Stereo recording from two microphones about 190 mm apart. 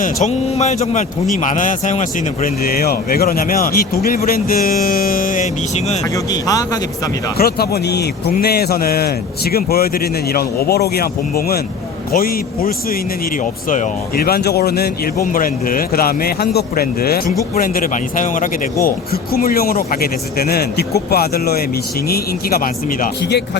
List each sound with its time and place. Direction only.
0.0 s speech: 35° left (ahead or behind)
6.1 s speech: 20° left (ahead or behind)
7.3 s speech: 55° left (ahead or behind)